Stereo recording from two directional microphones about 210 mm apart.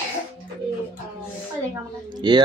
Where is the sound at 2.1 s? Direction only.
20° right (ahead or behind).